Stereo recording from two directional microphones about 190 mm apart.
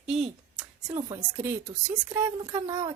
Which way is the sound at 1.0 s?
15° right (ahead or behind).